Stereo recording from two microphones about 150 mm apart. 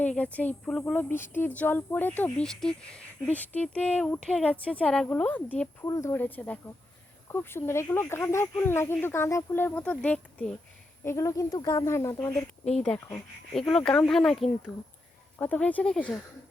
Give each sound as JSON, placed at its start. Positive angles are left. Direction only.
{"t": 0.0, "sound": "speech", "side_deg": 10}
{"t": 11.0, "sound": "speech", "side_deg": 20}
{"t": 12.8, "sound": "speech", "side_deg": 5}